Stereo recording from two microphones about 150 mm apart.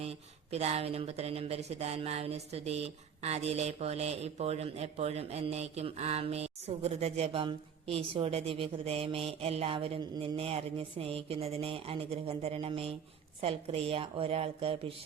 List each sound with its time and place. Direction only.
0.0 s a woman's voice: 45° right (ahead or behind)